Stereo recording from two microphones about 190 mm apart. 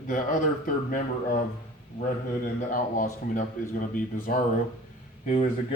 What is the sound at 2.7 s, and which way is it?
Speech, 45° left (ahead or behind).